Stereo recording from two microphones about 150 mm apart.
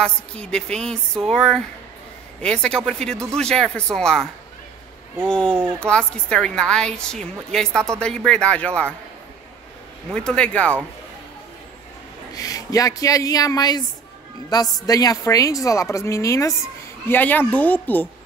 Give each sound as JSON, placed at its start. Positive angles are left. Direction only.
{"t": 0.0, "sound": "a woman's voice", "side_deg": 5}
{"t": 10.1, "sound": "speech", "side_deg": 5}
{"t": 12.4, "sound": "a woman's voice", "side_deg": 25}